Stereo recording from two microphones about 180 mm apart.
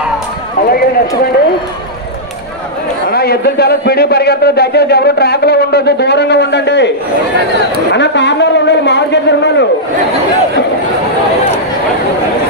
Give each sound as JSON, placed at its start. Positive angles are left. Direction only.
{"t": 0.7, "sound": "a man's voice", "side_deg": 55}
{"t": 3.1, "sound": "a man's voice", "side_deg": 60}
{"t": 7.9, "sound": "a man's voice", "side_deg": 75}